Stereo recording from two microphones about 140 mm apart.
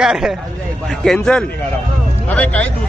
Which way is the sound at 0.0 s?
5° right (ahead or behind).